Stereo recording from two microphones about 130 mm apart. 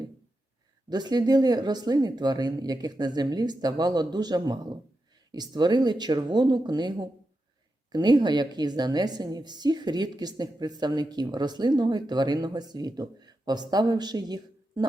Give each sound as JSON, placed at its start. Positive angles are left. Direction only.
{"t": 0.9, "sound": "a woman's voice", "side_deg": -35}